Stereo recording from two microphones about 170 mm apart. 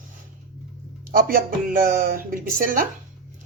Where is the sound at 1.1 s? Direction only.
55° right (ahead or behind).